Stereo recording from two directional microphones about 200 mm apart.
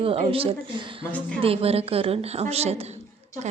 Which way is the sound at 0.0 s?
30° right (ahead or behind).